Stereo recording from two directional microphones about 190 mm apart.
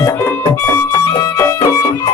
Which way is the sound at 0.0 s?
15° left (ahead or behind).